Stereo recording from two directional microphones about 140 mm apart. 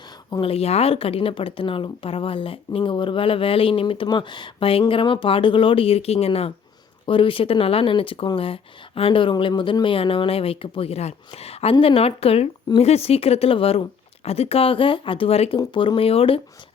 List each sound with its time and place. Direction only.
0.4 s speech: 45° left (ahead or behind)
15.5 s speech: 35° left (ahead or behind)